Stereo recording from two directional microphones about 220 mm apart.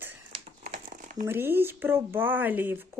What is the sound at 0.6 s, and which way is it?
Crumpling, 35° right (ahead or behind).